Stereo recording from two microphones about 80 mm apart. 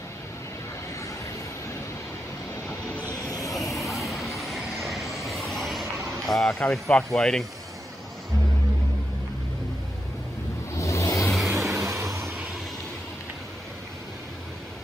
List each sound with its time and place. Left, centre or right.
3.2 s vehicle: left
3.4 s vehicle: centre
10.7 s vehicle: left
11.5 s vehicle: right